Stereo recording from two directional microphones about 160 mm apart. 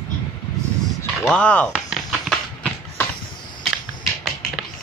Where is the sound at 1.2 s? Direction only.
10° left (ahead or behind).